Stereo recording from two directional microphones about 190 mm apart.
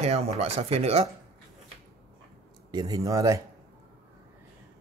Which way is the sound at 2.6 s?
20° right (ahead or behind).